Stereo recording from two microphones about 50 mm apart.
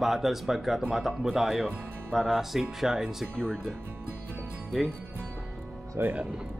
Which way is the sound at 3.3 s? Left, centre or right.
Centre.